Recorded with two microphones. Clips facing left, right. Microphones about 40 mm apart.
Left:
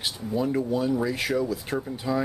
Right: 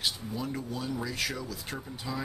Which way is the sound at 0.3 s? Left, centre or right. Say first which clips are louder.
Left 10 dB; centre.